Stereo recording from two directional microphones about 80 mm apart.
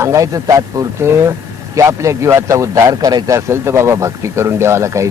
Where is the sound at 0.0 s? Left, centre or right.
Right.